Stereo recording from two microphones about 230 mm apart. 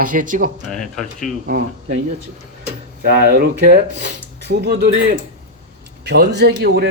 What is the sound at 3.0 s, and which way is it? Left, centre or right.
Speech, right.